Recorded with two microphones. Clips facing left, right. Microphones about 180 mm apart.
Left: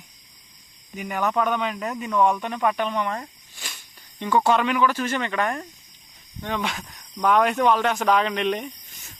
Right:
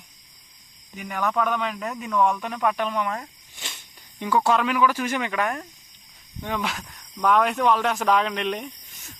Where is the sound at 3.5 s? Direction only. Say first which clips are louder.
Right 1 dB; 20° right (ahead or behind).